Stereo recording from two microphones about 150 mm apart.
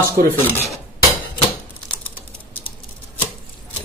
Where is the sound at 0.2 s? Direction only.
85° right.